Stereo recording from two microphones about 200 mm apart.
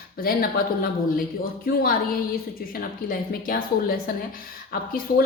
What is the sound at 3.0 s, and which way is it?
Speech, 45° left (ahead or behind).